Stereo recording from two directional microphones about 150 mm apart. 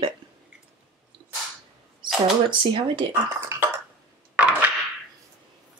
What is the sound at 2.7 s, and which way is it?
Speech, 35° right (ahead or behind).